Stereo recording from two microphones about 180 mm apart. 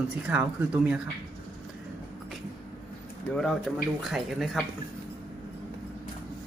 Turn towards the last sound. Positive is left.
turn(degrees=0)  # may be behind; listen again after turning